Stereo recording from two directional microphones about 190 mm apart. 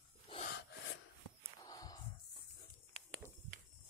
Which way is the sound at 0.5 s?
65° left (ahead or behind).